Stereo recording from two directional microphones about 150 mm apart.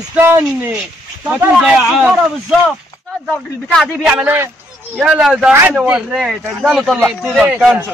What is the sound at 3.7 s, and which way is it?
Speech, 5° right (ahead or behind).